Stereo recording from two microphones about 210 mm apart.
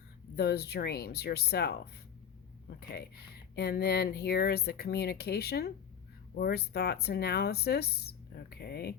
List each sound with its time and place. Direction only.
0.3 s speech: 50° left (ahead or behind)